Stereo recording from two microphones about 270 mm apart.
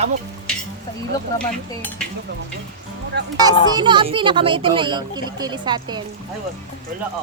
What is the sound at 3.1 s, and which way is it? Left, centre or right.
Speech, right.